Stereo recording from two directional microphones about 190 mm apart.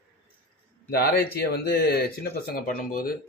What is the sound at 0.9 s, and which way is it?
Speech, 55° left (ahead or behind).